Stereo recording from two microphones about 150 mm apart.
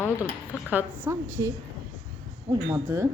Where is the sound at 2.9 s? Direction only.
15° right (ahead or behind).